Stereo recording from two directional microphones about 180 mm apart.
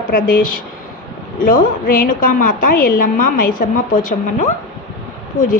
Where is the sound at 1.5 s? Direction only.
50° left (ahead or behind).